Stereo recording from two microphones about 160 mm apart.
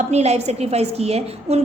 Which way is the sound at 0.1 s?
45° right (ahead or behind).